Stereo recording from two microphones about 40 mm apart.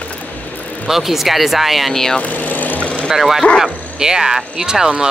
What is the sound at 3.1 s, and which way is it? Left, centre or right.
Speech, centre.